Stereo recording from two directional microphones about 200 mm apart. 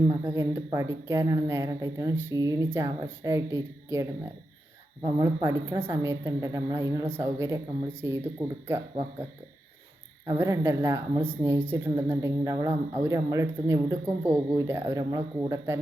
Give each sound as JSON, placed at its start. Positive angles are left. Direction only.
{"t": 0.1, "sound": "speech", "side_deg": -15}
{"t": 5.0, "sound": "speech", "side_deg": -15}
{"t": 10.2, "sound": "speech", "side_deg": -15}